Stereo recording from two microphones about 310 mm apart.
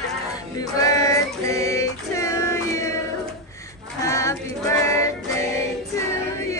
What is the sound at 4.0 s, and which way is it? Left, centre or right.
Music, centre.